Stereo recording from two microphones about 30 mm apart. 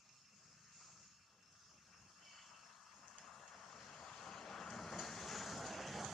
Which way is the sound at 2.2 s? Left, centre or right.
Centre.